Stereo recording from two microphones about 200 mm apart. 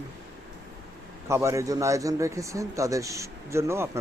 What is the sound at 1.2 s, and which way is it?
A man's voice, 15° right (ahead or behind).